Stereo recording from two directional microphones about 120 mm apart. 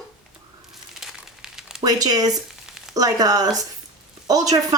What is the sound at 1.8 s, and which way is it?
Speech, 30° right (ahead or behind).